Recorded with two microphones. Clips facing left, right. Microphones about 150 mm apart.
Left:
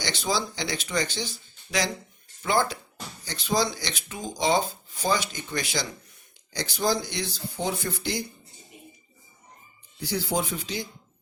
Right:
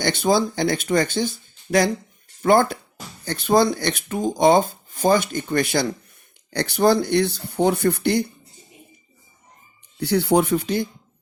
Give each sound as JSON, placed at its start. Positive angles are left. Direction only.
{"t": 0.0, "sound": "speech", "side_deg": -55}
{"t": 10.0, "sound": "speech", "side_deg": -65}